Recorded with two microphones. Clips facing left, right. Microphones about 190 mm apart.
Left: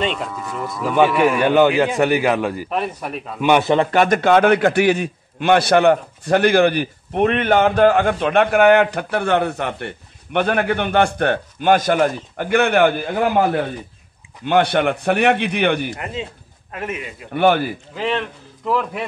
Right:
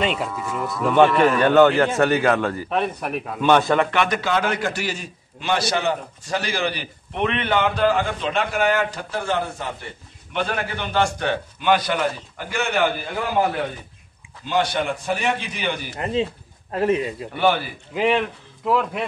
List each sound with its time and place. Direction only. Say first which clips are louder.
0.0 s a man's voice: even; 5° right (ahead or behind); by 3.7 s 10° left (ahead or behind)
3.9 s a man's voice: left 7 dB; 45° left (ahead or behind)
14.4 s a man's voice: left 6 dB; 60° left (ahead or behind)
16.7 s a man's voice: right 8 dB; 35° right (ahead or behind)
17.3 s speech: left 5 dB; 50° left (ahead or behind)
17.9 s speech: right 3 dB; 15° right (ahead or behind)
18.7 s a man's voice: even; centre (ahead or behind)